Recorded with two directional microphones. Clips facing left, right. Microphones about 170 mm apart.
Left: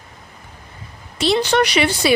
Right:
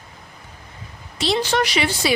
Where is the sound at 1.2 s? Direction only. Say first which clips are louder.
Left 4 dB; 60° left (ahead or behind).